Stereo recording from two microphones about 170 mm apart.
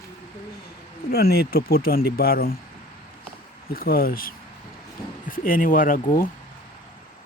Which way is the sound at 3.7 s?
60° left (ahead or behind).